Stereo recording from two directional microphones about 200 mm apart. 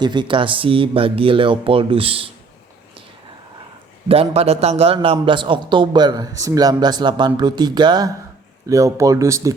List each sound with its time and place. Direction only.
0.0 s a man's voice: 20° right (ahead or behind)
4.1 s a man's voice: 30° right (ahead or behind)